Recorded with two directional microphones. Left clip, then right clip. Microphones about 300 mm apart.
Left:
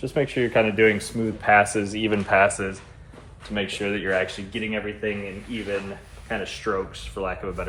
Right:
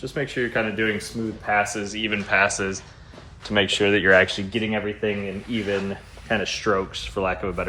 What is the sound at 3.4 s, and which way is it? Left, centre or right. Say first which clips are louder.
Speech: right 7 dB; right.